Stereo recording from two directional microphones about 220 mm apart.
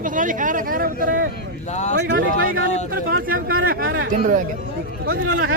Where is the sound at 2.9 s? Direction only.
40° right (ahead or behind).